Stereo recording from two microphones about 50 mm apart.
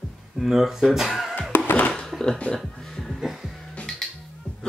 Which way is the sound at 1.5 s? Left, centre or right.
Left.